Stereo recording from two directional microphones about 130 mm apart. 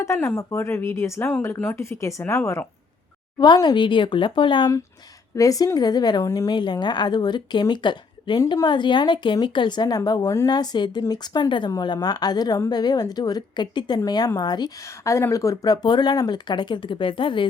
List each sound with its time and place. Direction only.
0.0 s speech: 20° left (ahead or behind)
3.3 s a woman's voice: 35° left (ahead or behind)
5.4 s a woman's voice: 25° left (ahead or behind)